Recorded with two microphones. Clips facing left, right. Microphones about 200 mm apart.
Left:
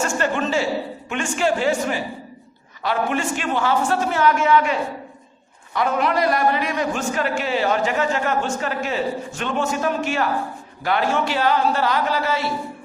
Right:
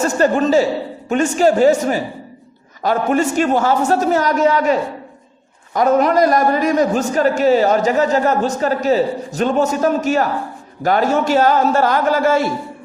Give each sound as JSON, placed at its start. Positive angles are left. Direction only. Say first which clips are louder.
{"t": 0.0, "sound": "a man's voice", "louder": "right 7 dB", "side_deg": -40}